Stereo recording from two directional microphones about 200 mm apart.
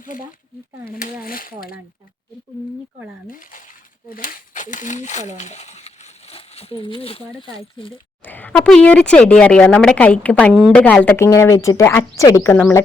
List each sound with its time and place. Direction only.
1.2 s speech: 45° left (ahead or behind)
4.1 s a sound: 45° left (ahead or behind); by 7.2 s 25° left (ahead or behind)
7.4 s speech: 25° left (ahead or behind)
8.2 s speech: 10° left (ahead or behind)